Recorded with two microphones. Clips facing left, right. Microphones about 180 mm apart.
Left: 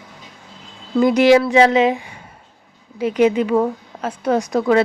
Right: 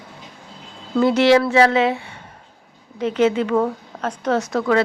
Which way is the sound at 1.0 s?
15° left (ahead or behind).